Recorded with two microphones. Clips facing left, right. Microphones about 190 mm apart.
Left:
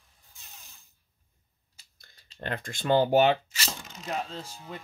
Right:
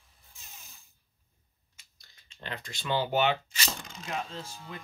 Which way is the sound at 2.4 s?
50° left (ahead or behind).